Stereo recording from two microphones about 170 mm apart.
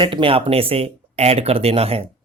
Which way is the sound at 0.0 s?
30° right (ahead or behind).